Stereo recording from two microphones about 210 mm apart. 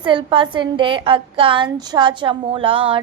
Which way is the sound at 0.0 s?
25° right (ahead or behind).